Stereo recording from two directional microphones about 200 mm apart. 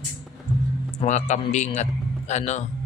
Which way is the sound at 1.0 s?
35° left (ahead or behind).